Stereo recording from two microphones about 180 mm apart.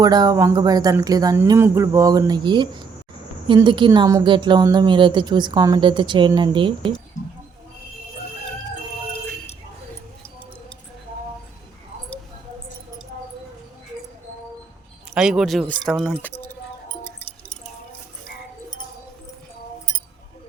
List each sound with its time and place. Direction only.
0.0 s speech: 20° right (ahead or behind)
15.1 s speech: 5° right (ahead or behind)
17.0 s keys jangling: 10° left (ahead or behind)